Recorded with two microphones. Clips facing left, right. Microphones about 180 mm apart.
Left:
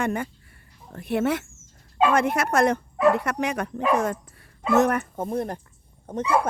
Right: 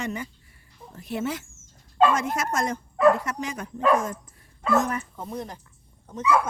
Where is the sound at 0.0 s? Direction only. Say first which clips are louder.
Left 5 dB; 55° left (ahead or behind).